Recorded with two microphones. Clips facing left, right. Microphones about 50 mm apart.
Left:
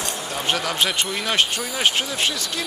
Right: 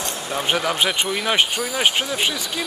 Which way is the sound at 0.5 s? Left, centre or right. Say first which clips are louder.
Right 2 dB; centre.